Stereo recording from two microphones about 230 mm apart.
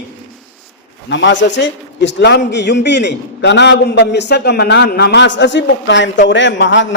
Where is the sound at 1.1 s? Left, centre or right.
Left.